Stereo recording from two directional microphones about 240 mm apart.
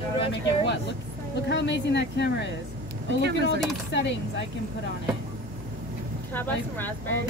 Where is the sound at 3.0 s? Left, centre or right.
Right.